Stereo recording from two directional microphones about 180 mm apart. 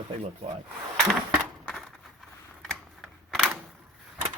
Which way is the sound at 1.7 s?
Centre (ahead or behind).